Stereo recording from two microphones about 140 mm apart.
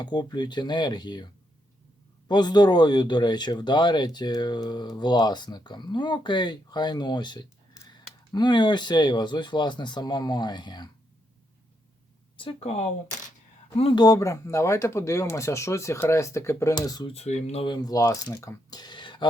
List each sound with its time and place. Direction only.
0.0 s speech: 30° left (ahead or behind)
12.4 s speech: 40° left (ahead or behind)
14.0 s speech: 25° left (ahead or behind)
17.1 s speech: 50° left (ahead or behind)
17.7 s speech: 25° left (ahead or behind)